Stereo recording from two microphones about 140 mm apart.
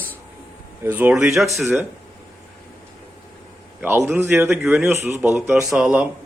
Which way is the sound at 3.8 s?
15° right (ahead or behind).